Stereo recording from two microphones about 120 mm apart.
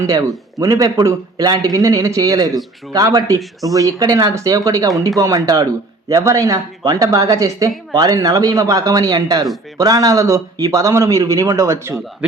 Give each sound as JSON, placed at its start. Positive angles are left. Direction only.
{"t": 0.0, "sound": "a man's voice", "side_deg": -30}